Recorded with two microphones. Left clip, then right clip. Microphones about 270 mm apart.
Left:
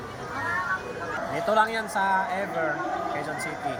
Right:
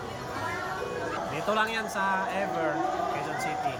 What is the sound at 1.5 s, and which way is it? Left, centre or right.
Speech, centre.